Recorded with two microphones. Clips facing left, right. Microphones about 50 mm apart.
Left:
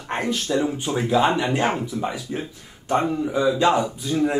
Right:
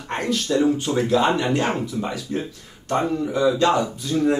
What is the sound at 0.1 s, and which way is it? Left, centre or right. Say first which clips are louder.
Speech: right 1 dB; centre.